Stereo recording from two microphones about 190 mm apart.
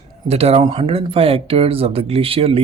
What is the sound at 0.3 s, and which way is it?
Speech, 30° right (ahead or behind).